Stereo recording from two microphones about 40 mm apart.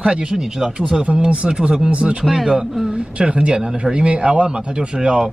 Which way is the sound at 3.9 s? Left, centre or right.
Right.